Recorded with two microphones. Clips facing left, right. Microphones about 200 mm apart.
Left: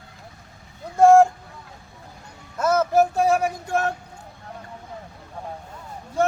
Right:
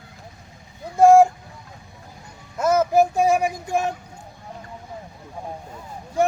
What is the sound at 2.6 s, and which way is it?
Child singing, 15° right (ahead or behind).